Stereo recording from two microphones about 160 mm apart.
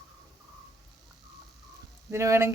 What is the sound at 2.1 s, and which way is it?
Speech, 15° right (ahead or behind).